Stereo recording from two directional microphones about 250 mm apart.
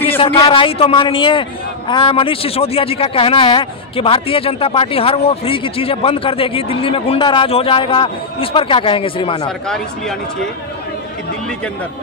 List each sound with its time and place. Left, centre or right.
0.2 s a man's voice: left